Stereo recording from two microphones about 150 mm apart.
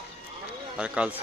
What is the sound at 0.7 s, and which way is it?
Speech, 5° right (ahead or behind).